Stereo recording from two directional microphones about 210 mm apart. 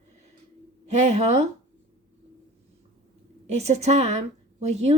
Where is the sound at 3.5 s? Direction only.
30° right (ahead or behind).